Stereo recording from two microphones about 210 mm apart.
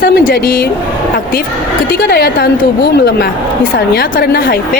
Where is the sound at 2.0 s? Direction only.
50° left (ahead or behind).